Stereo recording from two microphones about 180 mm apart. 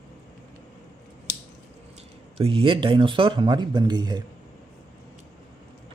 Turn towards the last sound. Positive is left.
turn(degrees=-25)  # may be behind; listen again after turning